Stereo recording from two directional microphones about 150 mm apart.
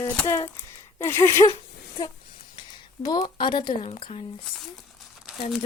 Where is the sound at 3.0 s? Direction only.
25° left (ahead or behind).